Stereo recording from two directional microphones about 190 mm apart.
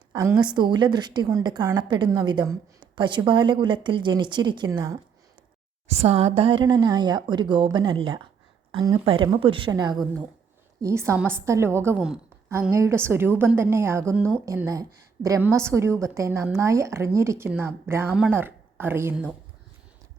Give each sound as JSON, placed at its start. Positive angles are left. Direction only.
{"t": 0.1, "sound": "a woman's voice", "side_deg": -15}
{"t": 5.9, "sound": "a woman's voice", "side_deg": -35}
{"t": 12.5, "sound": "a woman's voice", "side_deg": -15}